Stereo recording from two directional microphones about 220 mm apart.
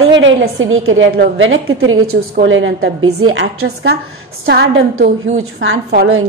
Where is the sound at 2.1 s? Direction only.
55° right (ahead or behind).